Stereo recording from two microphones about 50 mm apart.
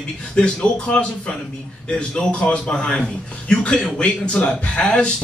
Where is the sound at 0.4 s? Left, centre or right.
Left.